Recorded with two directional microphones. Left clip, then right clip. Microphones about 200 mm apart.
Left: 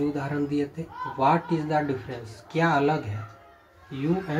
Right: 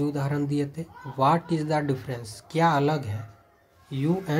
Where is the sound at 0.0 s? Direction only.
30° right (ahead or behind).